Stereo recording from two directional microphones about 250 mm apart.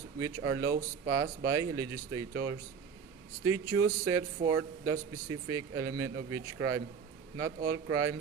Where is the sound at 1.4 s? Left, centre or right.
Centre.